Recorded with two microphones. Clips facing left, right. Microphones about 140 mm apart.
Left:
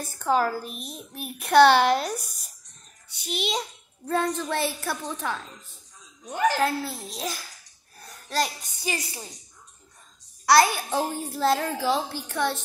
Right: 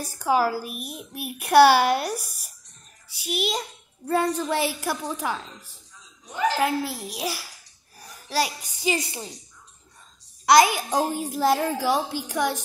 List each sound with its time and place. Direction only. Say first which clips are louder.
0.0 s a child's voice: right 1 dB; 10° right (ahead or behind)
6.6 s a child's voice: right 1 dB; 15° right (ahead or behind)
8.9 s speech: right 5 dB; 25° right (ahead or behind)
10.4 s a child's voice: right 2 dB; 15° right (ahead or behind)